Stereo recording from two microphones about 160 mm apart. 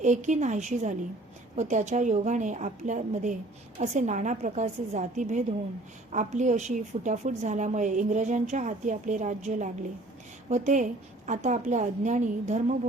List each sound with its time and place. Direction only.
0.0 s a woman's voice: 50° right (ahead or behind)